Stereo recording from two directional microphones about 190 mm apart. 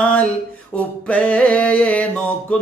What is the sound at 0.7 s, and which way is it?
Mantra, 5° left (ahead or behind).